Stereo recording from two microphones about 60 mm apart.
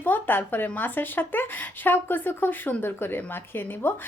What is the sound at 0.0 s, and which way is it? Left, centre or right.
A woman's voice, left.